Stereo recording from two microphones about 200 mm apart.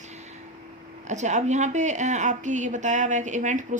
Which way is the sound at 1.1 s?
35° right (ahead or behind).